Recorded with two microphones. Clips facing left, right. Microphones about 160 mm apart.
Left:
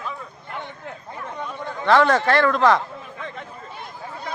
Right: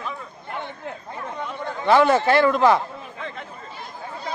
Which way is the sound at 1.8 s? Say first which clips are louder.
Right 1 dB; 5° right (ahead or behind).